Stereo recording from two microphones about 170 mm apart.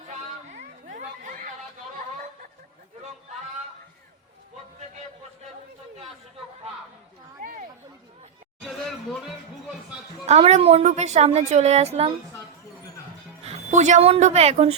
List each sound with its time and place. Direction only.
0.5 s chatter: 50° right (ahead or behind)
8.6 s chatter: centre (ahead or behind)
10.2 s a woman's voice: 40° right (ahead or behind)
13.4 s speech: 45° right (ahead or behind)